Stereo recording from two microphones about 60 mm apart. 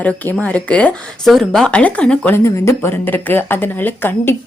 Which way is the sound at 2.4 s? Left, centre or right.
Left.